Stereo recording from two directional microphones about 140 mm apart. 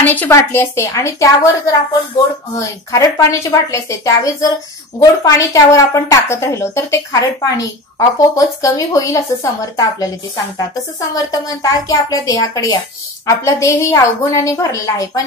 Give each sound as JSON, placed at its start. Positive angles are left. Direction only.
{"t": 0.0, "sound": "a woman's voice", "side_deg": 10}